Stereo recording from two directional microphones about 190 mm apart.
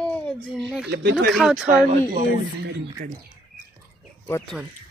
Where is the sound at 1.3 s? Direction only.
Centre (ahead or behind).